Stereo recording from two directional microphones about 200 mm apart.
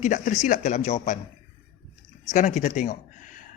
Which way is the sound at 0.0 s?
35° left (ahead or behind).